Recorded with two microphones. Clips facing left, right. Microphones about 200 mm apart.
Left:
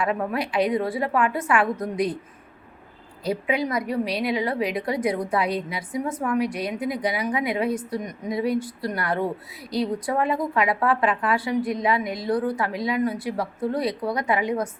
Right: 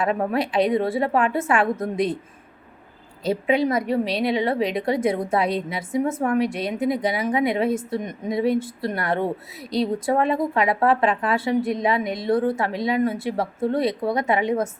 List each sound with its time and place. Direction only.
0.0 s a woman's voice: 25° right (ahead or behind)
3.2 s a woman's voice: 25° right (ahead or behind)